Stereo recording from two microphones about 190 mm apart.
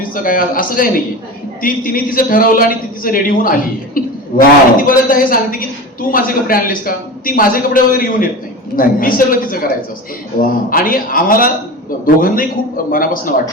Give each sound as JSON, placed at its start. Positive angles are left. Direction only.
{"t": 0.1, "sound": "a woman's voice", "side_deg": 50}